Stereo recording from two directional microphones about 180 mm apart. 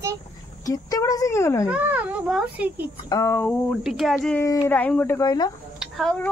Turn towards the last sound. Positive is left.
turn(degrees=5)  # may be behind; listen again after turning